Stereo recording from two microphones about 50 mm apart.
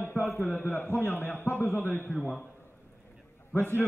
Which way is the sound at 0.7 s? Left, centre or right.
Left.